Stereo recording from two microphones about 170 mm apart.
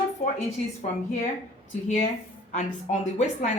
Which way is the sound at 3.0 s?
40° left (ahead or behind).